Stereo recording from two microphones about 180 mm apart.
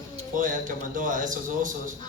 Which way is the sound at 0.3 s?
45° right (ahead or behind).